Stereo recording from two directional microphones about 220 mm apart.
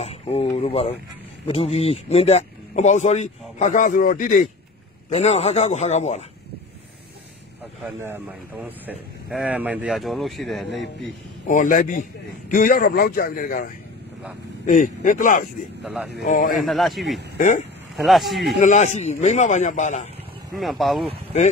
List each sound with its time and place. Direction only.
0.0 s a man's voice: 30° left (ahead or behind)
7.8 s speech: 10° right (ahead or behind)
11.4 s a man's voice: 35° left (ahead or behind)
14.7 s a man's voice: 35° left (ahead or behind)
15.8 s speech: centre (ahead or behind)
16.3 s a man's voice: 35° left (ahead or behind)
16.5 s speech: centre (ahead or behind)
18.6 s a man's voice: 35° left (ahead or behind)
20.5 s speech: centre (ahead or behind)